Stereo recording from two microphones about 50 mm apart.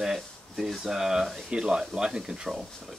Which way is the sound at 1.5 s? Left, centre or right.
Centre.